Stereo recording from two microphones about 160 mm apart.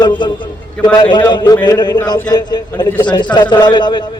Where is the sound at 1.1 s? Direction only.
30° left (ahead or behind).